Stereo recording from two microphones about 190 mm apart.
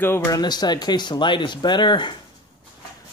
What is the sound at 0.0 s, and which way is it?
Speech, 10° left (ahead or behind).